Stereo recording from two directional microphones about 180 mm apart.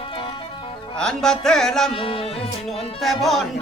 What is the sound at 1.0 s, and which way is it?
Music, 5° left (ahead or behind).